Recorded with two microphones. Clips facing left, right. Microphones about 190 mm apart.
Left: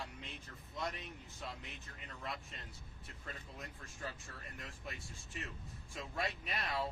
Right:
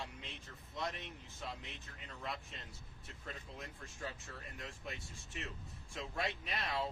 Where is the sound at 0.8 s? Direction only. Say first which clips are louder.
Even; centre (ahead or behind).